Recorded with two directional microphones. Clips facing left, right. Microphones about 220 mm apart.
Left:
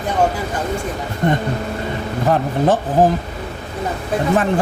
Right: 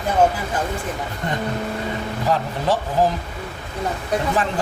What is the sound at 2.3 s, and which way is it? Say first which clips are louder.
Speech: left 5 dB; 50° left (ahead or behind).